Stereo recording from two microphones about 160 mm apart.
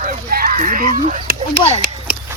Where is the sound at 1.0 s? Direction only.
40° right (ahead or behind).